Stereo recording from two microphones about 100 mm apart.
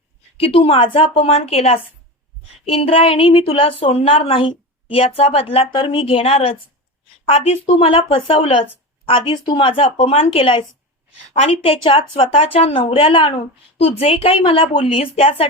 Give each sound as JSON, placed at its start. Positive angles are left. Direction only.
{"t": 0.3, "sound": "a woman's voice", "side_deg": 65}
{"t": 2.6, "sound": "a woman's voice", "side_deg": 70}
{"t": 11.3, "sound": "a woman's voice", "side_deg": 75}